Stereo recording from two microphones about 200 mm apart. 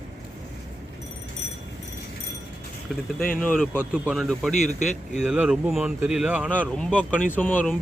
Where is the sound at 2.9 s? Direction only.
Centre (ahead or behind).